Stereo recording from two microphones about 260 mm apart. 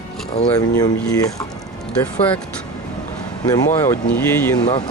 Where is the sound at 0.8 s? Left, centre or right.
Centre.